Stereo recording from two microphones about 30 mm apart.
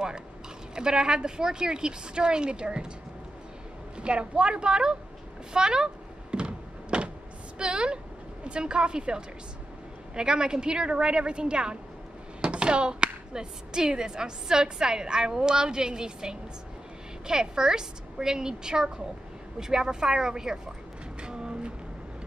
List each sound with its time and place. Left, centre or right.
0.7 s a woman's voice: right
4.0 s a woman's voice: right
6.3 s a sound: right
7.5 s a woman's voice: right
21.2 s vehicle: right